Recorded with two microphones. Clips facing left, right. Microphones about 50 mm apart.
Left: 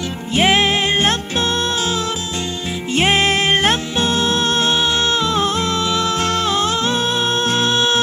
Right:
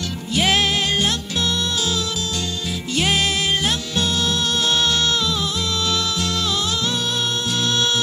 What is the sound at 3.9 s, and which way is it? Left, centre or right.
Music, left.